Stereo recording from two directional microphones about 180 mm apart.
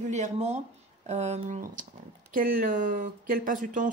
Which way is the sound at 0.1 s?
40° right (ahead or behind).